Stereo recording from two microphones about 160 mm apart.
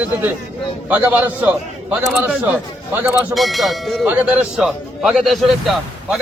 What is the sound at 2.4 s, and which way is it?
Speech, 15° right (ahead or behind).